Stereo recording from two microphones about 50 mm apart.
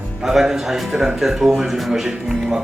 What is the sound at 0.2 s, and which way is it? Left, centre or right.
Speech, centre.